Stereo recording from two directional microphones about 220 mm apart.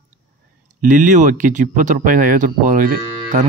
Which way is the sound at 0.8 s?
35° right (ahead or behind).